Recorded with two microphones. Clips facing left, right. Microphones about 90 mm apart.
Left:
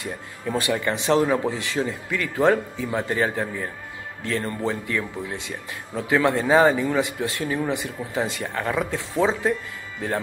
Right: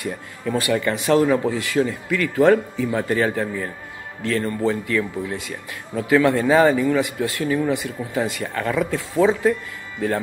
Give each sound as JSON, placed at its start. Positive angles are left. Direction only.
{"t": 0.0, "sound": "speech", "side_deg": 20}